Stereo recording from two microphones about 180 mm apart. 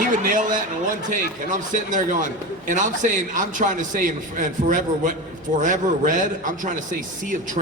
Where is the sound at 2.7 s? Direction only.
45° right (ahead or behind).